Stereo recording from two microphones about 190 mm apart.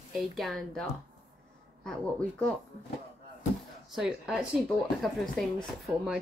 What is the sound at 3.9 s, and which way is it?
Speech, 5° right (ahead or behind).